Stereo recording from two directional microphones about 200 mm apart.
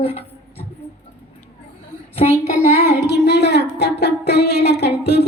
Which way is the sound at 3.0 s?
55° left (ahead or behind).